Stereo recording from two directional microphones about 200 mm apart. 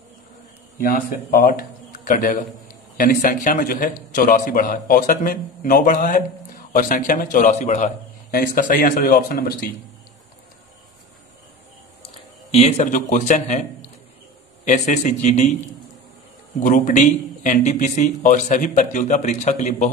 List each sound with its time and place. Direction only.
0.8 s a man's voice: 45° left (ahead or behind)
12.4 s speech: 35° left (ahead or behind)
16.6 s speech: 40° left (ahead or behind)